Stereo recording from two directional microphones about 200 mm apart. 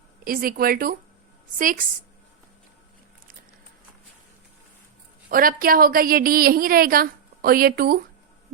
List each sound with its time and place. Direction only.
0.3 s a woman's voice: 45° right (ahead or behind)
5.3 s a woman's voice: 45° right (ahead or behind)